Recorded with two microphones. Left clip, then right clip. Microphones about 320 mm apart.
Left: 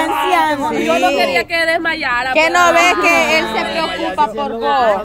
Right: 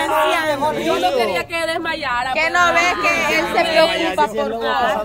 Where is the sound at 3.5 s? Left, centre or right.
Right.